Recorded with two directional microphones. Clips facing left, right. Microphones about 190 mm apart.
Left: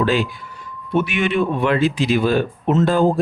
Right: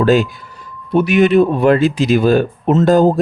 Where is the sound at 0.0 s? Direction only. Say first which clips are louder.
Right 6 dB; 45° right (ahead or behind).